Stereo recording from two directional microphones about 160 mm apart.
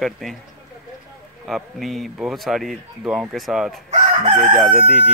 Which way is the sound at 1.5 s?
Centre (ahead or behind).